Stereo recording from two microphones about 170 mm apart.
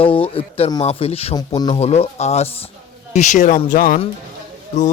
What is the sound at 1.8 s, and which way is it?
Speech, 40° left (ahead or behind).